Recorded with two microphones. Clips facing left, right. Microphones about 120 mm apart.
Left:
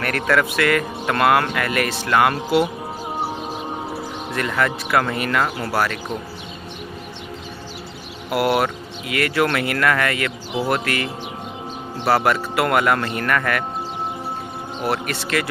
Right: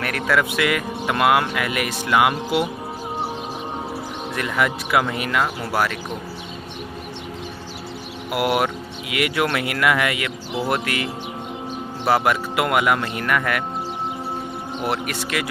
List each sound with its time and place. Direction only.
0.0 s speech: 5° right (ahead or behind)
4.4 s speech: 10° right (ahead or behind)
8.3 s speech: 10° right (ahead or behind)
14.8 s speech: 15° right (ahead or behind)